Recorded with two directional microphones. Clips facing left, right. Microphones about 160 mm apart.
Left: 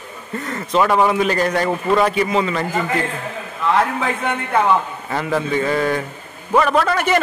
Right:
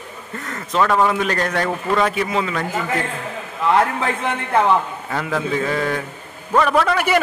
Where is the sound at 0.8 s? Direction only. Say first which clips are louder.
Left 2 dB; 10° left (ahead or behind).